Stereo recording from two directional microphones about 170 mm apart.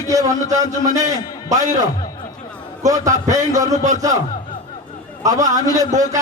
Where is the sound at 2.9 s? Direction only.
20° right (ahead or behind).